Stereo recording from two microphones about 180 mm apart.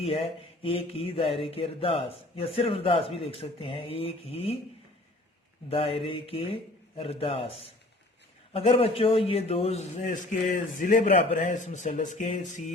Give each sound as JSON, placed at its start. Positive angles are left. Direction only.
{"t": 0.0, "sound": "mantra", "side_deg": 35}
{"t": 5.6, "sound": "mantra", "side_deg": 30}
{"t": 8.5, "sound": "mantra", "side_deg": 30}